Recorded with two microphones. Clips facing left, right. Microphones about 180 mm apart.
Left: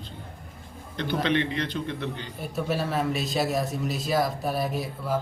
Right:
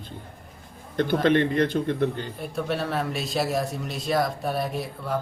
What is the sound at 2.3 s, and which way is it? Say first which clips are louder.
A man's voice: even; centre (ahead or behind).